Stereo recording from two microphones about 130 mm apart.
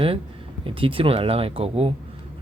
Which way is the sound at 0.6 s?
45° right (ahead or behind).